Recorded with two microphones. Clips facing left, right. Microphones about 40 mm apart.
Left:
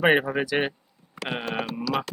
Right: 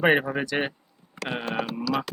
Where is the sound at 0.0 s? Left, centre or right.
Centre.